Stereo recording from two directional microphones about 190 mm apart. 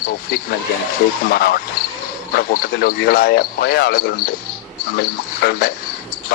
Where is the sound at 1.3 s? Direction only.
55° left (ahead or behind).